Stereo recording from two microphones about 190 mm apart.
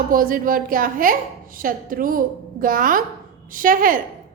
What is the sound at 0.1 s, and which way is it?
A woman's voice, 45° right (ahead or behind).